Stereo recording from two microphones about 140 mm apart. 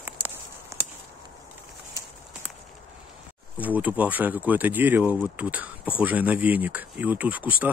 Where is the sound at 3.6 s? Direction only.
10° right (ahead or behind).